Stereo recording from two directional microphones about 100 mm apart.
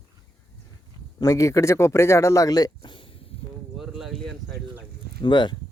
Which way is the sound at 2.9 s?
55° left (ahead or behind).